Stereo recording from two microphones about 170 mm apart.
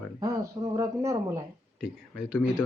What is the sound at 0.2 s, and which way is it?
Speech, 20° right (ahead or behind).